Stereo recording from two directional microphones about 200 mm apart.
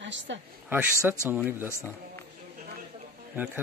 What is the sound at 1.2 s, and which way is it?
Speech, 10° right (ahead or behind).